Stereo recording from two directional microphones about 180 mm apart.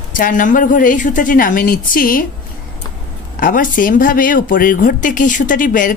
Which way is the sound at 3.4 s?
50° left (ahead or behind).